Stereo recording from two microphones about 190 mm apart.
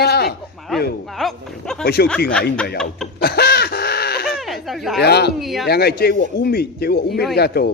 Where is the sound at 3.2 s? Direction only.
55° left (ahead or behind).